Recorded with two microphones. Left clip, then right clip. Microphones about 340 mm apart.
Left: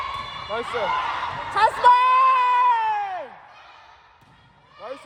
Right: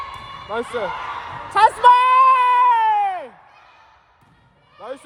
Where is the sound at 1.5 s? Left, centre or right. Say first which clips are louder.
Right 4 dB; right.